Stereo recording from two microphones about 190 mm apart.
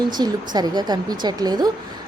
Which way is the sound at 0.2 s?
20° right (ahead or behind).